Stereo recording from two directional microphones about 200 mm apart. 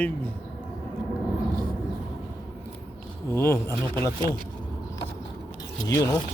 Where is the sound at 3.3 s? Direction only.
10° left (ahead or behind).